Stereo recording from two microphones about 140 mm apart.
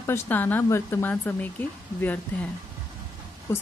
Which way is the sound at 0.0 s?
15° left (ahead or behind).